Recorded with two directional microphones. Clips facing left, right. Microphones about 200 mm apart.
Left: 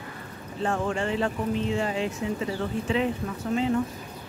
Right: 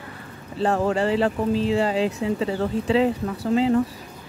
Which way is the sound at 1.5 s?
90° right.